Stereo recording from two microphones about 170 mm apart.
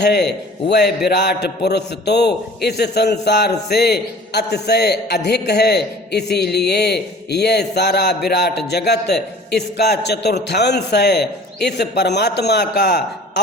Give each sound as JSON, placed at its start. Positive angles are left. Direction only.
{"t": 0.0, "sound": "a man's voice", "side_deg": 80}